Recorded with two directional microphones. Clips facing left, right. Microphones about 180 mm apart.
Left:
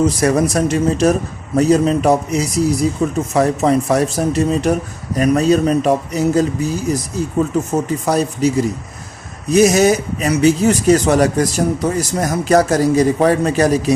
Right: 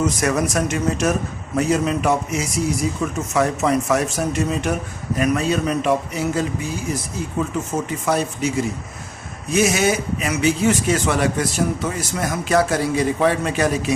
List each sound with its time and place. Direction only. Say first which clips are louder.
0.0 s speech: left 5 dB; 30° left (ahead or behind)